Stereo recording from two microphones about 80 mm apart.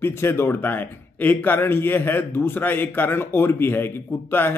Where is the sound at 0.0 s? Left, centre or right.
Left.